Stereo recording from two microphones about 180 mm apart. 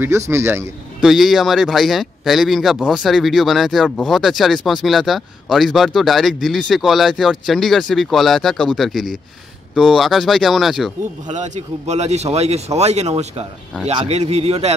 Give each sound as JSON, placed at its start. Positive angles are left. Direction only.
{"t": 0.3, "sound": "a man's voice", "side_deg": -15}
{"t": 1.0, "sound": "speech", "side_deg": 0}
{"t": 11.3, "sound": "speech", "side_deg": -40}